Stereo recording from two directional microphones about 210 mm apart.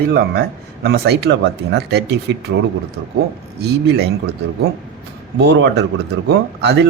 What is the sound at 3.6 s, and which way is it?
Speech, 50° right (ahead or behind).